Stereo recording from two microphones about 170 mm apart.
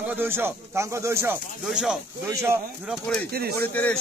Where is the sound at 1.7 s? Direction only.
5° right (ahead or behind).